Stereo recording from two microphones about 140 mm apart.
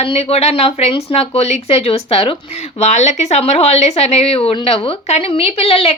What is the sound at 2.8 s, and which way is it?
A woman's voice, 55° left (ahead or behind).